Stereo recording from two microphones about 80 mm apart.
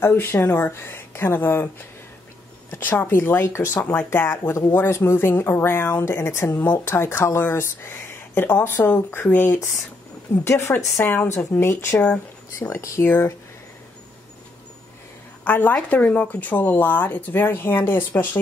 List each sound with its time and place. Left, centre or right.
0.0 s speech: left
4.3 s speech: left
15.4 s speech: left